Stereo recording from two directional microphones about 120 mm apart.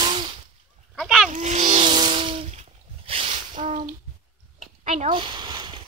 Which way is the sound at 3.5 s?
90° right.